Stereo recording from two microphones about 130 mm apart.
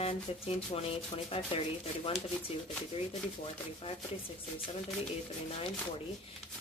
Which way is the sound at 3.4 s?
45° left (ahead or behind).